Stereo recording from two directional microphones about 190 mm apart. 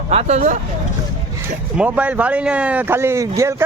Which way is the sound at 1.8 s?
10° right (ahead or behind).